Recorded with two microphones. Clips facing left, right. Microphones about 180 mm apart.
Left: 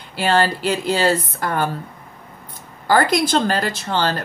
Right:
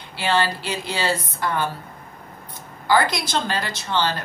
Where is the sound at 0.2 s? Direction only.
45° left (ahead or behind).